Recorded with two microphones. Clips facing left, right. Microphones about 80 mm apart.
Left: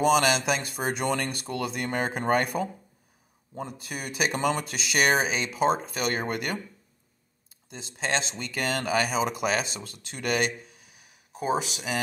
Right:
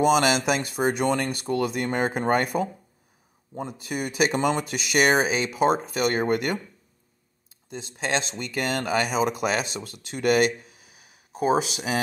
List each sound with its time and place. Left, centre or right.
0.0 s speech: centre
7.7 s speech: centre
11.3 s speech: centre